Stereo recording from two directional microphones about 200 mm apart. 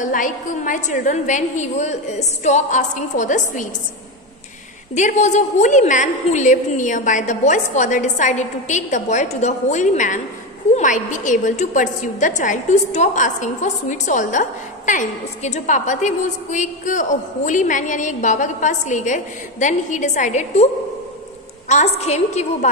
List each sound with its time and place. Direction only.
0.0 s a woman's voice: 40° left (ahead or behind)
4.9 s a woman's voice: 35° left (ahead or behind)
21.6 s a woman's voice: 35° left (ahead or behind)